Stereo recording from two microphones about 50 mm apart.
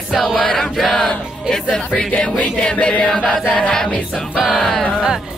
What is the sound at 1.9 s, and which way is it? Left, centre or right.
Music, left.